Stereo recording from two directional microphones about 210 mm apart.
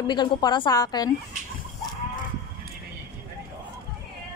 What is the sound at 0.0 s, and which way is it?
Speech, 20° left (ahead or behind).